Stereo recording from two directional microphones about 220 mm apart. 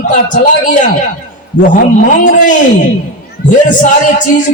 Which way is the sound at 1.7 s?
40° left (ahead or behind).